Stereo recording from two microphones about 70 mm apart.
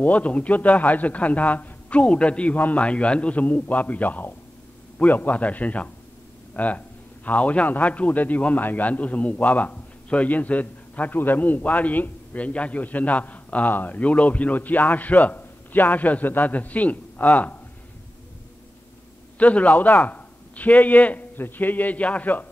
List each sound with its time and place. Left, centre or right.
0.0 s a man's voice: left
19.3 s a man's voice: centre